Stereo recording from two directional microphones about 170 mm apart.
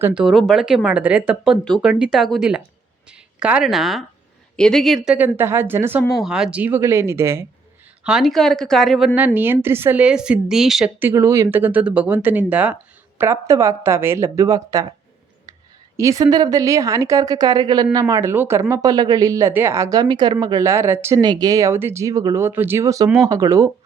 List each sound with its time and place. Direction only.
0.0 s a woman's voice: 5° right (ahead or behind)
1.6 s a woman's voice: centre (ahead or behind)
5.0 s speech: 10° right (ahead or behind)
8.0 s a woman's voice: centre (ahead or behind)
11.1 s speech: 15° right (ahead or behind)
16.0 s a woman's voice: 20° right (ahead or behind)